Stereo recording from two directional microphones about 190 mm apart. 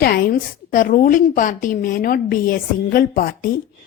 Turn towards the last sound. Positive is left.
turn(degrees=50)  # may be behind; listen again after turning